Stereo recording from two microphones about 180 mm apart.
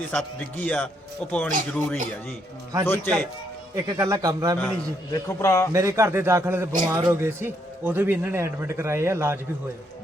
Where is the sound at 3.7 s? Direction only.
15° right (ahead or behind).